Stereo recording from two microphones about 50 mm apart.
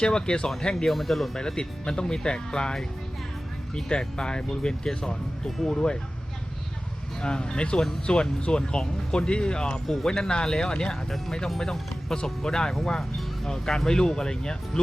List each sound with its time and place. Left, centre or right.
0.0 s speech: centre
0.9 s speech: centre
5.7 s speech: centre
7.2 s speech: centre